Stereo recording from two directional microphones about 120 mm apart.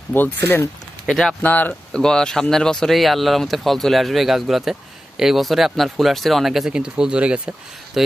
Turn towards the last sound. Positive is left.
turn(degrees=-10)  # may be behind; listen again after turning